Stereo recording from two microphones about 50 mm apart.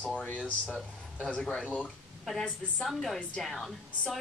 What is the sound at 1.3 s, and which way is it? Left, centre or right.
A woman's voice, centre.